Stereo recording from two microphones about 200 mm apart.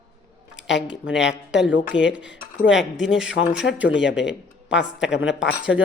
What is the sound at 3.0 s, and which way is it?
Speech, 5° right (ahead or behind).